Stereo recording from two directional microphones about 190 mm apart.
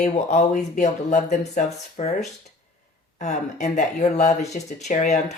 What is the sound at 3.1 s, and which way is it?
Speech, 40° left (ahead or behind).